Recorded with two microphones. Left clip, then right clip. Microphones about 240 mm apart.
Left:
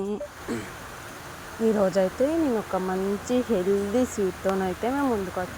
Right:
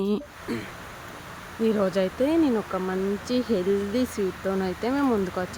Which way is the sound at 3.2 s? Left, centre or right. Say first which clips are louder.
Left 2 dB; centre.